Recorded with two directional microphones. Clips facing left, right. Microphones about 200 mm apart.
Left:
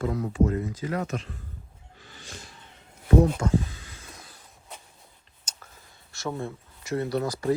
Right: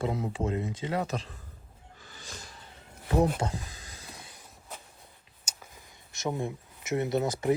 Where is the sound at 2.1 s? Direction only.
40° right (ahead or behind).